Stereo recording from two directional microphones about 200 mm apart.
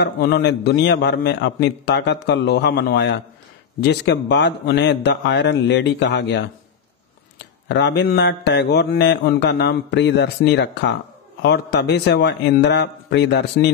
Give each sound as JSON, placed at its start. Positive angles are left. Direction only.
{"t": 0.0, "sound": "mantra", "side_deg": 55}
{"t": 7.6, "sound": "mantra", "side_deg": 60}